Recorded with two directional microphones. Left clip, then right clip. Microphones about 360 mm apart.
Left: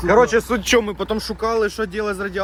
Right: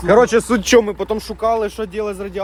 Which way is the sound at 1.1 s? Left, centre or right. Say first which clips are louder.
Right 3 dB; centre.